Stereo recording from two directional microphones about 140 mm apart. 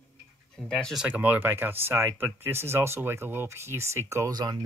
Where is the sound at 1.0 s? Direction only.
10° right (ahead or behind).